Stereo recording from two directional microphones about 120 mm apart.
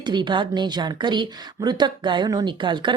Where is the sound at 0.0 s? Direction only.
40° right (ahead or behind).